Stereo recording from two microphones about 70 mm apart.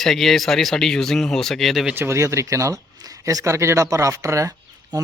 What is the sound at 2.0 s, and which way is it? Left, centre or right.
Speech, right.